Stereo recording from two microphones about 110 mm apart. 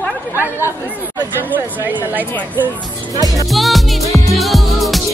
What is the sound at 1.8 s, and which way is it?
Speech, 15° right (ahead or behind).